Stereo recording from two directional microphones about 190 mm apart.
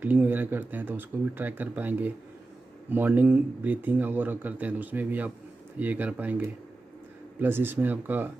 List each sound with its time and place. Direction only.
0.0 s speech: 10° right (ahead or behind)